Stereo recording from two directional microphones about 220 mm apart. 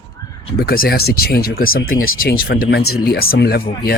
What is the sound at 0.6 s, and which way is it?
Speech, 45° left (ahead or behind).